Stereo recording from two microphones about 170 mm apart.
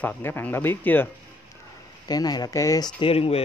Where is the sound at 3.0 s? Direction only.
35° left (ahead or behind).